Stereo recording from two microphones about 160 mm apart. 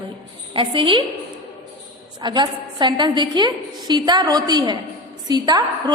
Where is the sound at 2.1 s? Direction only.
25° right (ahead or behind).